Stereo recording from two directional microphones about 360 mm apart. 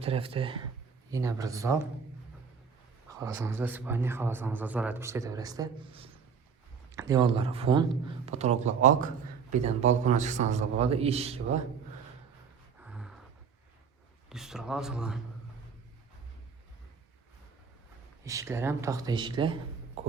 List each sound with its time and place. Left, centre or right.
0.0 s a man's voice: centre
3.1 s a man's voice: centre
12.8 s a sound: centre
14.3 s a man's voice: centre
18.3 s a man's voice: centre
20.0 s a sound: centre